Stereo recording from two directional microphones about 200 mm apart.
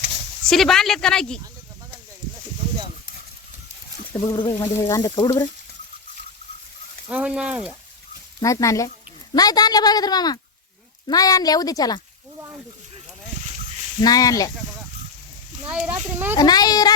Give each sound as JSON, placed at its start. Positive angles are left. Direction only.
{"t": 0.4, "sound": "speech", "side_deg": 0}
{"t": 4.1, "sound": "speech", "side_deg": 15}
{"t": 7.1, "sound": "speech", "side_deg": -5}
{"t": 8.4, "sound": "speech", "side_deg": 15}
{"t": 14.0, "sound": "speech", "side_deg": 20}
{"t": 15.6, "sound": "speech", "side_deg": -5}
{"t": 16.4, "sound": "speech", "side_deg": 20}